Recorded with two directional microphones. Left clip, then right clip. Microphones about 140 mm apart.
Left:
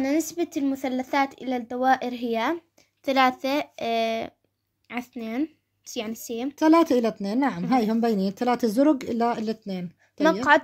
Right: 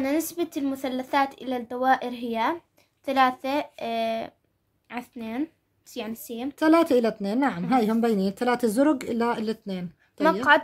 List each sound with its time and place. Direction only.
0.0 s speech: 25° left (ahead or behind); by 6.5 s 45° left (ahead or behind)
6.5 s speech: 20° left (ahead or behind)